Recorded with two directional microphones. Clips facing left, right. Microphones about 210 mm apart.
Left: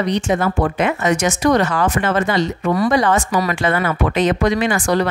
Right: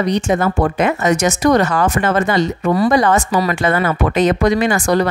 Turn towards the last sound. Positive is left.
turn(degrees=-40)  # may be behind; listen again after turning